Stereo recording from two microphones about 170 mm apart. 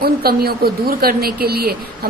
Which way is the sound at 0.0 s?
65° right (ahead or behind).